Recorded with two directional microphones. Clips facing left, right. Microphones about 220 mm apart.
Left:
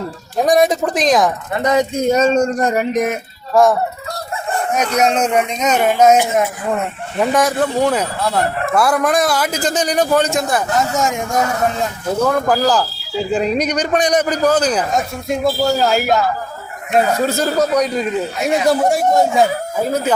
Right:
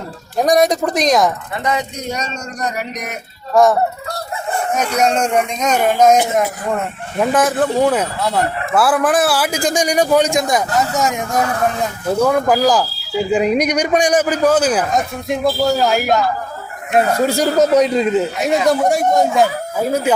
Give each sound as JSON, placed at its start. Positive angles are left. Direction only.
{"t": 0.3, "sound": "a man's voice", "side_deg": 0}
{"t": 1.6, "sound": "speech", "side_deg": 45}
{"t": 3.5, "sound": "a man's voice", "side_deg": 0}
{"t": 4.9, "sound": "speech", "side_deg": 5}
{"t": 10.8, "sound": "a man's voice", "side_deg": 0}
{"t": 12.2, "sound": "speech", "side_deg": -10}
{"t": 17.1, "sound": "speech", "side_deg": -10}
{"t": 18.4, "sound": "a man's voice", "side_deg": 0}